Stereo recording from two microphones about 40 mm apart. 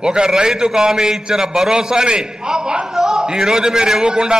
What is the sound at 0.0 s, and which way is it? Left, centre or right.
A man's voice, centre.